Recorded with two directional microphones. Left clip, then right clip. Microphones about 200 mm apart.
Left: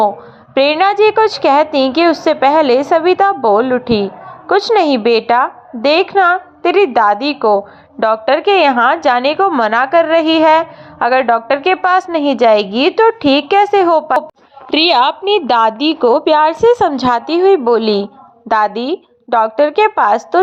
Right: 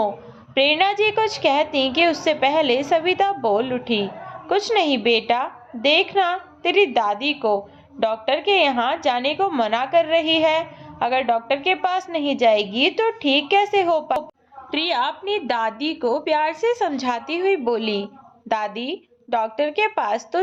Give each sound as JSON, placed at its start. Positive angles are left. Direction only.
{"t": 0.5, "sound": "a woman's voice", "side_deg": 25}
{"t": 14.7, "sound": "a woman's voice", "side_deg": 35}